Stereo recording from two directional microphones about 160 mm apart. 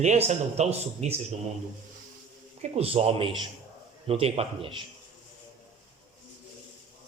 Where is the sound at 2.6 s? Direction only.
40° right (ahead or behind).